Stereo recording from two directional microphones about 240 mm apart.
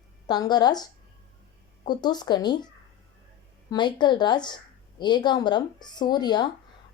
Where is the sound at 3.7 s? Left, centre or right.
Centre.